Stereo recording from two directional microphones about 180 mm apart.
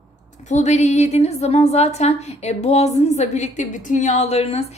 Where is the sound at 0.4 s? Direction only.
40° left (ahead or behind).